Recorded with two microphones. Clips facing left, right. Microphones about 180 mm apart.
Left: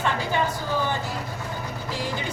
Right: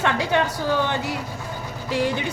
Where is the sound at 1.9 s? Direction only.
65° right (ahead or behind).